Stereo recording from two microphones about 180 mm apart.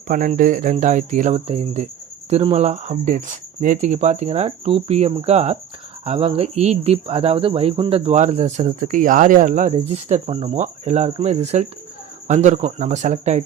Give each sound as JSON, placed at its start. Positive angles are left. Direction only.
{"t": 0.1, "sound": "speech", "side_deg": -50}
{"t": 9.7, "sound": "speech", "side_deg": -35}